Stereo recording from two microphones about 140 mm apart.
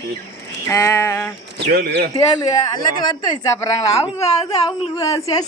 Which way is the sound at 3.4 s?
25° left (ahead or behind).